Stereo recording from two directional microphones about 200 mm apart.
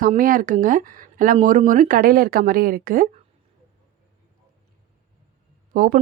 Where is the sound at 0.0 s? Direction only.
45° right (ahead or behind).